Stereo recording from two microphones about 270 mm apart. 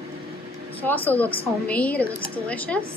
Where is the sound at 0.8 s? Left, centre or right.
Centre.